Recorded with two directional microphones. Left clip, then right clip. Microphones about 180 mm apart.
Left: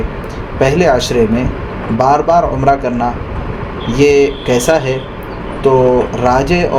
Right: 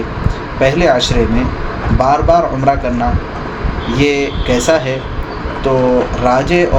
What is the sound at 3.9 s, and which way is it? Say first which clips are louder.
Speech: left 5 dB; 50° left (ahead or behind).